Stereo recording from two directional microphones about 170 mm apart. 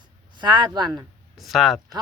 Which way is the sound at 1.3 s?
Centre (ahead or behind).